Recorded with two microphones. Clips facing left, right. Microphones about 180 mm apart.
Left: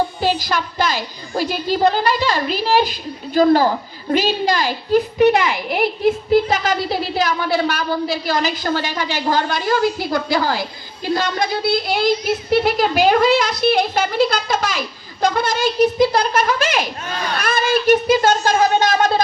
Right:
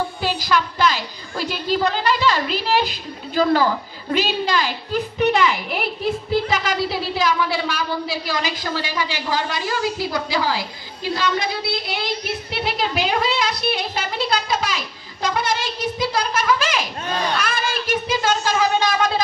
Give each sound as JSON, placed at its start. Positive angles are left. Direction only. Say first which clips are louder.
{"t": 0.2, "sound": "a woman's voice", "louder": "left 2 dB", "side_deg": 45}
{"t": 16.0, "sound": "a woman's voice", "louder": "left 7 dB", "side_deg": 45}